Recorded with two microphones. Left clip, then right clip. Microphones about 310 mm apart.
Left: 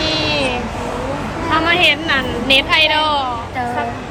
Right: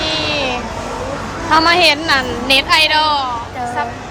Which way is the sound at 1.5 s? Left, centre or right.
Centre.